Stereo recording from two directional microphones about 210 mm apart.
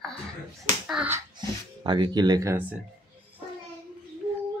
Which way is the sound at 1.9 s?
20° right (ahead or behind).